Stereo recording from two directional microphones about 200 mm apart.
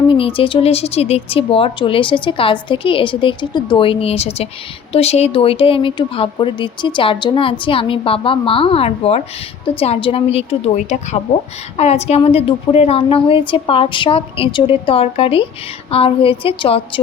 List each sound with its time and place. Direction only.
0.1 s a woman's voice: 25° left (ahead or behind)